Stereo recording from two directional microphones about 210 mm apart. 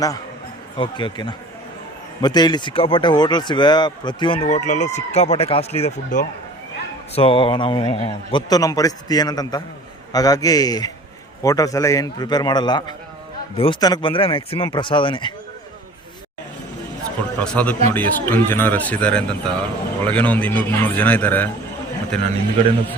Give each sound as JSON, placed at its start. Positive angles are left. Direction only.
{"t": 0.8, "sound": "a man's voice", "side_deg": 20}
{"t": 17.4, "sound": "a man's voice", "side_deg": 5}